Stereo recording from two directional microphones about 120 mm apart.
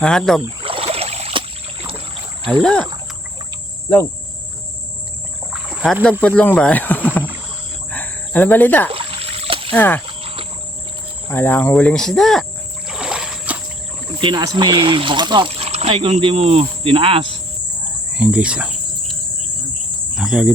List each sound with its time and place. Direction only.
0.0 s speech: 5° left (ahead or behind)
0.6 s boat: 50° right (ahead or behind)
2.5 s speech: 5° left (ahead or behind)
5.5 s a sound: 5° right (ahead or behind)
6.2 s speech: 15° left (ahead or behind)
7.9 s cricket: 15° left (ahead or behind)
8.9 s a sound: 50° right (ahead or behind)
9.7 s speech: 15° left (ahead or behind)
10.1 s cricket: 50° right (ahead or behind)
11.3 s speech: 15° left (ahead or behind)
12.9 s splash: 5° right (ahead or behind)
14.2 s speech: 40° right (ahead or behind)
18.1 s cricket: 10° right (ahead or behind)
20.1 s cricket: 5° right (ahead or behind)